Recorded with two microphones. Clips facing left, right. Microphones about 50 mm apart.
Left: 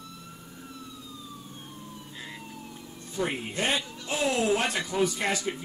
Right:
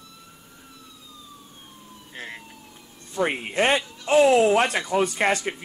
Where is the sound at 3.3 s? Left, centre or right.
Right.